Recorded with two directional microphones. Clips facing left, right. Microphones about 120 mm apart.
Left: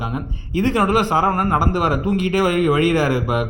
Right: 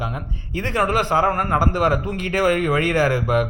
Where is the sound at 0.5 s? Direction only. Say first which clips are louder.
Left 4 dB; 15° left (ahead or behind).